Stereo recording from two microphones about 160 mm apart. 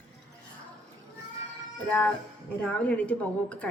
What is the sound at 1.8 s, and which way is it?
Music, 10° left (ahead or behind).